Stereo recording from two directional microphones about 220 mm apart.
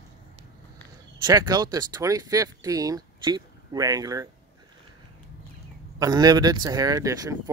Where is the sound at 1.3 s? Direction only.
20° right (ahead or behind).